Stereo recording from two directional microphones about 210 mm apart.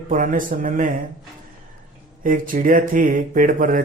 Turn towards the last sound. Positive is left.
turn(degrees=-40)  # may be behind; listen again after turning